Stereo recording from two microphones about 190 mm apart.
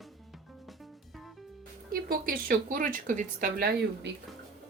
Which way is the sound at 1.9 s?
50° right (ahead or behind).